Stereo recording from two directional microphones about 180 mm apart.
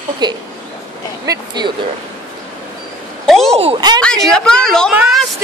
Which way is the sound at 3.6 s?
30° right (ahead or behind).